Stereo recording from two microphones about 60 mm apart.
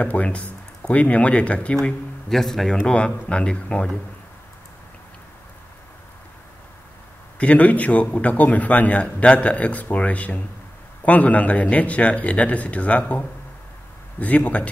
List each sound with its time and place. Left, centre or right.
0.0 s a man's voice: left
1.8 s speech: centre
2.9 s speech: centre
7.3 s a man's voice: left
14.2 s a man's voice: left